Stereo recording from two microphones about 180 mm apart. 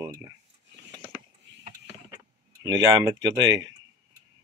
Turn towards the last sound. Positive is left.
turn(degrees=-25)  # may be behind; listen again after turning